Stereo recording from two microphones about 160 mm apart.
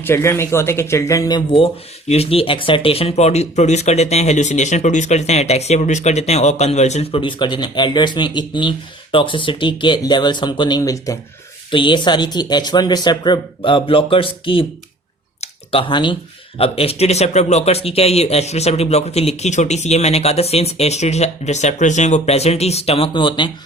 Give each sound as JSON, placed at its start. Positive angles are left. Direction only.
{"t": 0.0, "sound": "speech", "side_deg": 15}
{"t": 11.7, "sound": "speech", "side_deg": 30}
{"t": 15.4, "sound": "a sound", "side_deg": 35}
{"t": 16.6, "sound": "speech", "side_deg": 35}